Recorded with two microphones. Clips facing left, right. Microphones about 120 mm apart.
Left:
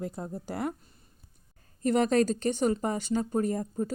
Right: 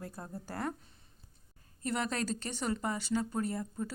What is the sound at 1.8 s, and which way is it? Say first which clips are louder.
A woman's voice: left 10 dB; 50° left (ahead or behind).